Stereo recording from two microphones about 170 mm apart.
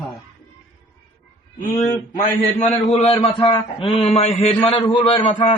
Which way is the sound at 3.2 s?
35° left (ahead or behind).